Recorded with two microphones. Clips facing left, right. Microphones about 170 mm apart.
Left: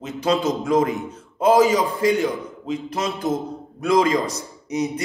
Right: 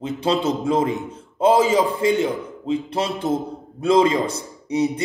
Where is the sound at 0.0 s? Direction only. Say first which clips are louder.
Even; 30° right (ahead or behind).